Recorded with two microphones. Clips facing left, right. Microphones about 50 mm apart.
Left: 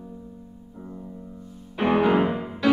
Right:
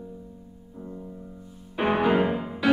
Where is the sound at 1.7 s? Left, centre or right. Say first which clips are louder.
Left 2 dB; centre.